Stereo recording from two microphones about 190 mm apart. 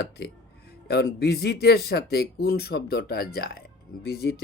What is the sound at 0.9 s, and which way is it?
Speech, 55° left (ahead or behind).